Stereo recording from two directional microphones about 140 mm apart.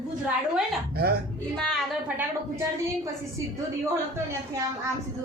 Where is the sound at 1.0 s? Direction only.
90° right.